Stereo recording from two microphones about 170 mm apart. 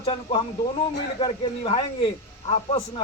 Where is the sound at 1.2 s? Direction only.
35° left (ahead or behind).